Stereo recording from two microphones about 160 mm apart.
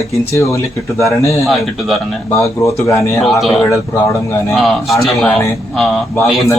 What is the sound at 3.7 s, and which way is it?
Speech, 20° left (ahead or behind).